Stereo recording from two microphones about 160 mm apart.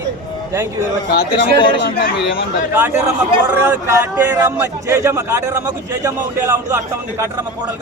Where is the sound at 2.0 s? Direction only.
65° left (ahead or behind).